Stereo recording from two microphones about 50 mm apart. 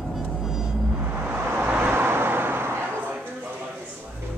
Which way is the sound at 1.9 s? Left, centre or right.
Right.